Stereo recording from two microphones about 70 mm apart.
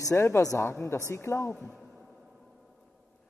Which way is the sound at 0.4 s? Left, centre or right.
Left.